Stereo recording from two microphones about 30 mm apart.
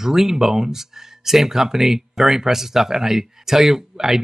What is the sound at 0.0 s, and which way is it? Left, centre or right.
Speech, centre.